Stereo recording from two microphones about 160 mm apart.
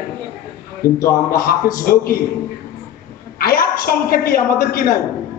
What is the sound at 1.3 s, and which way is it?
Speech, 60° left (ahead or behind).